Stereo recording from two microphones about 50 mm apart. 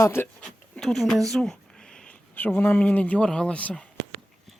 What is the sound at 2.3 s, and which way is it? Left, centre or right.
Speech, left.